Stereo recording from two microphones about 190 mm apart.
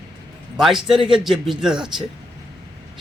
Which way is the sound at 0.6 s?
Centre (ahead or behind).